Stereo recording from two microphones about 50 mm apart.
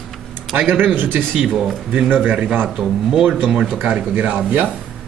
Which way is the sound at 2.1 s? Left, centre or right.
Right.